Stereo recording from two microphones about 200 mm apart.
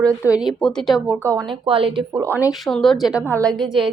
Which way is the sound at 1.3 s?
25° right (ahead or behind).